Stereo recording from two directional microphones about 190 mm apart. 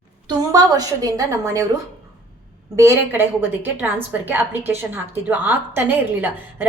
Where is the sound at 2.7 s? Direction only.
15° right (ahead or behind).